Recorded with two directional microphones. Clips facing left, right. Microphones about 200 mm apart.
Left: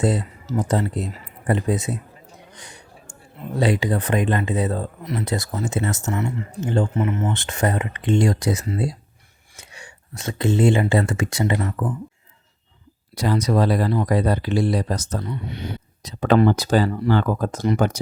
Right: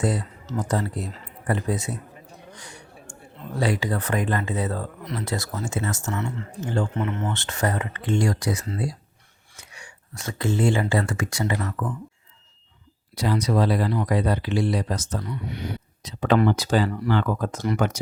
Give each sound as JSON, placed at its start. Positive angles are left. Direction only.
{"t": 0.0, "sound": "speech", "side_deg": 25}
{"t": 2.5, "sound": "a sound", "side_deg": 20}
{"t": 3.5, "sound": "speech", "side_deg": 20}
{"t": 6.1, "sound": "speech", "side_deg": 10}
{"t": 6.9, "sound": "speech", "side_deg": 5}
{"t": 7.3, "sound": "speech", "side_deg": 15}
{"t": 13.1, "sound": "speech", "side_deg": 45}
{"t": 16.0, "sound": "speech", "side_deg": 45}